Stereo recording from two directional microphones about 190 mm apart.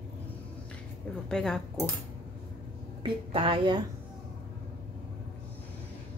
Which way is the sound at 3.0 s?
25° right (ahead or behind).